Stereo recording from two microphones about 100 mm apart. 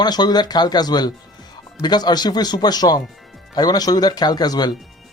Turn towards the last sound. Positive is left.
turn(degrees=40)  # may be behind; listen again after turning